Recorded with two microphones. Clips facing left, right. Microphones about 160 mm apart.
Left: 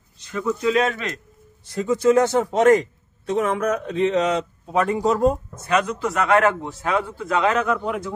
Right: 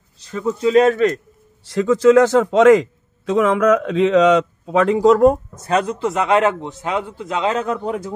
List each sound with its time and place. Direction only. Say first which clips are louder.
0.2 s speech: right 3 dB; 30° right (ahead or behind)
1.6 s a man's voice: right 6 dB; 90° right
5.7 s a man's voice: right 3 dB; 30° right (ahead or behind)